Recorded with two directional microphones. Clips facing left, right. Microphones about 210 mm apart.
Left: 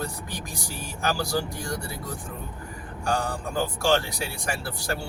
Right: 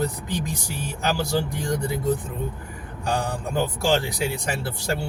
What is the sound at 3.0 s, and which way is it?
Speech, 20° right (ahead or behind).